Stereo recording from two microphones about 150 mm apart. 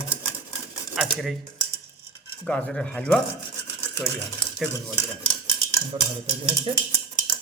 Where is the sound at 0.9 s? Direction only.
Centre (ahead or behind).